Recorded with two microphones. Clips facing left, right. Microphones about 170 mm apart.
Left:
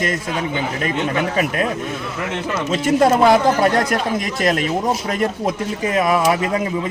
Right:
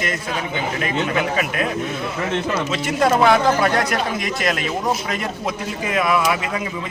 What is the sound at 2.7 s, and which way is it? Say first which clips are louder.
A man's voice: left 5 dB; 45° left (ahead or behind).